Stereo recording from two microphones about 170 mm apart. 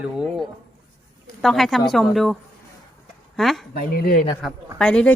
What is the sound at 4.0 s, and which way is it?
Speech, 60° left (ahead or behind).